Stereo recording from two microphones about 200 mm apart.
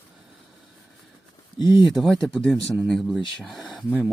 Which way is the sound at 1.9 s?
Centre (ahead or behind).